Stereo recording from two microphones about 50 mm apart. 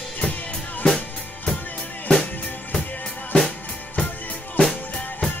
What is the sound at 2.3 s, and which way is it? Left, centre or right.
Drum, left.